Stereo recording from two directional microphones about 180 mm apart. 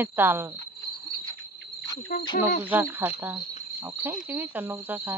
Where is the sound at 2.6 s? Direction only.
10° right (ahead or behind).